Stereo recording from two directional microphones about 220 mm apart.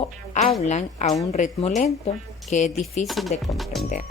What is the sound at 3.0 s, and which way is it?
Speech, centre (ahead or behind).